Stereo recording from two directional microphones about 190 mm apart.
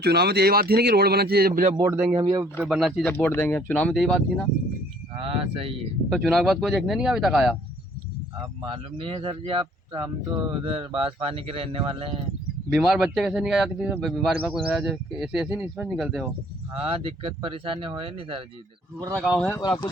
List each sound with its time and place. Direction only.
0.0 s speech: 60° right (ahead or behind)
1.9 s speech: 10° right (ahead or behind)
2.6 s speech: centre (ahead or behind)
5.1 s speech: 30° right (ahead or behind)
6.1 s speech: centre (ahead or behind)
8.6 s speech: 25° right (ahead or behind)
12.7 s speech: 5° right (ahead or behind)
16.7 s speech: 30° right (ahead or behind)
18.9 s speech: 15° right (ahead or behind)
19.2 s speech: 5° right (ahead or behind)
19.5 s speech: 15° left (ahead or behind)